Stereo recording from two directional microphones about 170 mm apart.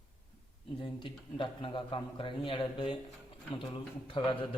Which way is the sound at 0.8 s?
30° left (ahead or behind).